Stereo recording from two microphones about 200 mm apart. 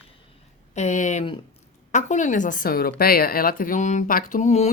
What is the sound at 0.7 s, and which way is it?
A woman's voice, 35° left (ahead or behind).